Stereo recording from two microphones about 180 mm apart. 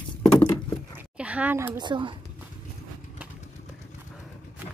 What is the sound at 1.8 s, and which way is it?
Speech, 25° right (ahead or behind).